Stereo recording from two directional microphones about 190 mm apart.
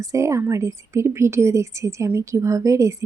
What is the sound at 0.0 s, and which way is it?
Speech, 15° right (ahead or behind).